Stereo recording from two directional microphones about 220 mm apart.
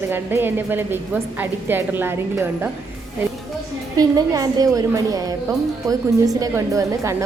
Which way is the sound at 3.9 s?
15° right (ahead or behind).